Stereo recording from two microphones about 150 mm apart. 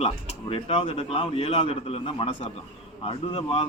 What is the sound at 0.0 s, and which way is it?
Speech, 40° left (ahead or behind).